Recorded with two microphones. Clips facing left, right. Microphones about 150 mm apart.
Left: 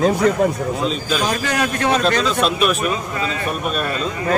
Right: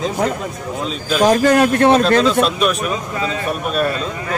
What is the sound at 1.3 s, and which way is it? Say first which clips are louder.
Speech: right 8 dB; 50° right (ahead or behind).